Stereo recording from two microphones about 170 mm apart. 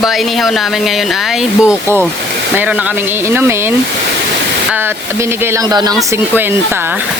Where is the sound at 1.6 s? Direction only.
5° right (ahead or behind).